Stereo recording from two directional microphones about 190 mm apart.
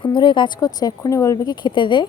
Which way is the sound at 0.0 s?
25° left (ahead or behind).